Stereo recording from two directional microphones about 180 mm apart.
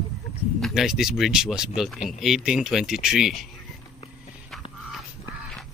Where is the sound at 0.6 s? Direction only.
Centre (ahead or behind).